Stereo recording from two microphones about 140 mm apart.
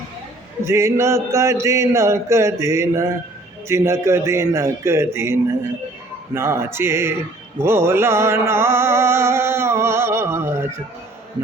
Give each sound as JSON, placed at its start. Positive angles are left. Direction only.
{"t": 0.6, "sound": "speech", "side_deg": -20}
{"t": 6.3, "sound": "music", "side_deg": -15}